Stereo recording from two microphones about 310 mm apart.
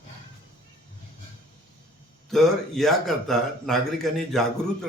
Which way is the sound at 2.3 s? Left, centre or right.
Centre.